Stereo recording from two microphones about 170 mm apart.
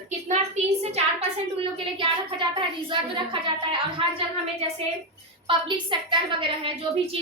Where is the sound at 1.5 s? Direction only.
30° right (ahead or behind).